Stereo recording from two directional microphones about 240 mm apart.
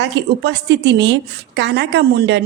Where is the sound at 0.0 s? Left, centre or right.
Right.